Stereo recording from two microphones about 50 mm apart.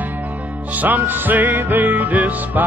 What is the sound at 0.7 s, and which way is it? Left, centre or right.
Music, right.